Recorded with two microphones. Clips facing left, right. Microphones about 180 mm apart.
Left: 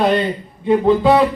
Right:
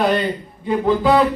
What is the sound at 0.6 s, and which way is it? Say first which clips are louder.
Speech: left 4 dB; 25° left (ahead or behind).